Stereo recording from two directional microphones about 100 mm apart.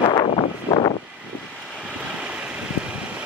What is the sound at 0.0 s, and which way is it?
Vehicle, 50° left (ahead or behind).